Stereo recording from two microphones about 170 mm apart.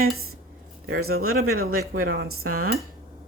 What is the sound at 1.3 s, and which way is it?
Dishes, 60° right (ahead or behind).